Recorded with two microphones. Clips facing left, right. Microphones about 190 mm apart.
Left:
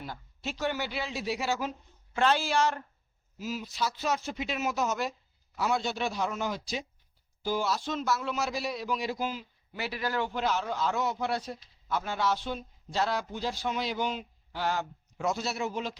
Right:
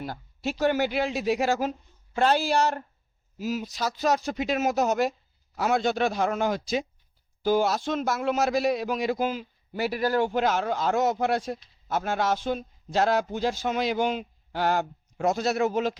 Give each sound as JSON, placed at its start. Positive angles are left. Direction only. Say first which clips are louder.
{"t": 0.6, "sound": "speech", "louder": "right 8 dB", "side_deg": -50}
{"t": 9.7, "sound": "speech", "louder": "right 7 dB", "side_deg": -40}